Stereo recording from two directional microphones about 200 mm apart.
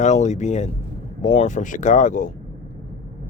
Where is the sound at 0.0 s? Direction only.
35° left (ahead or behind).